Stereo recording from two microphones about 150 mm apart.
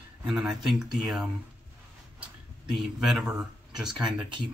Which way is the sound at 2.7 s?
Centre (ahead or behind).